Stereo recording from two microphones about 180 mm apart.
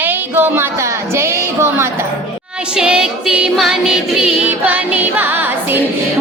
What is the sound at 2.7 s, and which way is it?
Music, 5° right (ahead or behind).